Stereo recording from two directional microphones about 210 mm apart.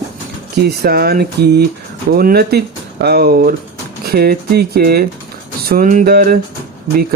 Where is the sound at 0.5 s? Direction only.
45° right (ahead or behind).